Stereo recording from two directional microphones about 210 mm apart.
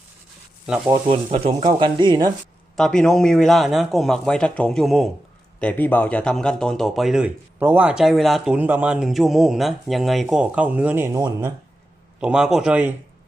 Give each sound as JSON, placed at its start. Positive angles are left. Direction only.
{"t": 0.9, "sound": "speech", "side_deg": -25}
{"t": 2.7, "sound": "speech", "side_deg": 5}
{"t": 12.2, "sound": "speech", "side_deg": -5}